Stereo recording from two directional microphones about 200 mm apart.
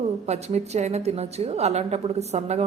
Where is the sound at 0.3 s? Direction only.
35° right (ahead or behind).